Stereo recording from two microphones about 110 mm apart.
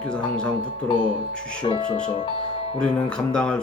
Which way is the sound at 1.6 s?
50° left (ahead or behind).